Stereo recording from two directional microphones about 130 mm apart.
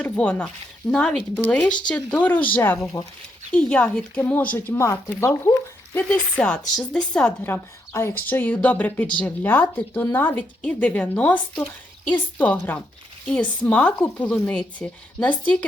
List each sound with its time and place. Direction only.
0.0 s speech: 10° left (ahead or behind)
3.5 s speech: 10° left (ahead or behind)
6.1 s speech: 10° left (ahead or behind)
7.4 s speech: 15° left (ahead or behind)